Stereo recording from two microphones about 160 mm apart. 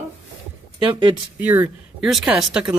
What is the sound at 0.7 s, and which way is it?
Speech, 30° right (ahead or behind).